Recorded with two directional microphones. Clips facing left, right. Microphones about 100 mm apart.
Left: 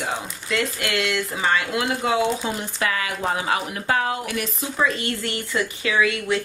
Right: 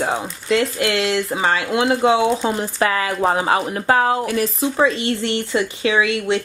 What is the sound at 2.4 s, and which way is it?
Speech, 35° right (ahead or behind).